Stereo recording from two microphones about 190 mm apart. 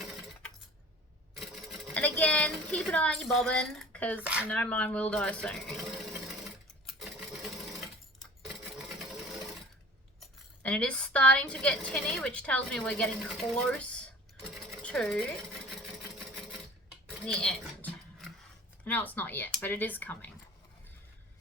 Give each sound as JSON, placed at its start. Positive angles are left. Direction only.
{"t": 0.0, "sound": "coin", "side_deg": 0}
{"t": 1.4, "sound": "sewing machine", "side_deg": 0}
{"t": 4.2, "sound": "speech", "side_deg": -5}
{"t": 4.4, "sound": "speech", "side_deg": 10}
{"t": 7.0, "sound": "sewing machine", "side_deg": 0}
{"t": 10.2, "sound": "speech", "side_deg": 5}
{"t": 14.8, "sound": "sewing machine", "side_deg": 5}
{"t": 17.2, "sound": "a sound", "side_deg": 5}
{"t": 18.9, "sound": "speech", "side_deg": 10}